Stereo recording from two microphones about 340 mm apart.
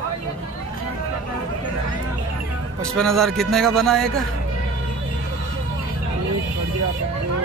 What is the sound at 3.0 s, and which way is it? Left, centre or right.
A man's voice, centre.